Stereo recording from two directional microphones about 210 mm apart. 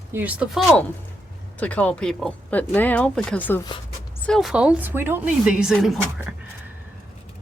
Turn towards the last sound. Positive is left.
turn(degrees=0)  # may be behind; listen again after turning